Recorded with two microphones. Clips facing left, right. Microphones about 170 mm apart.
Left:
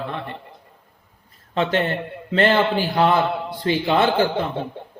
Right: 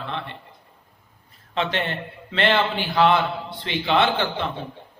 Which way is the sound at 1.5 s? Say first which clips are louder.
Left 5 dB; 45° left (ahead or behind).